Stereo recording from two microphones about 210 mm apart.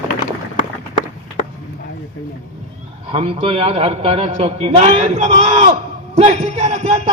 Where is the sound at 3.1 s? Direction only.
25° right (ahead or behind).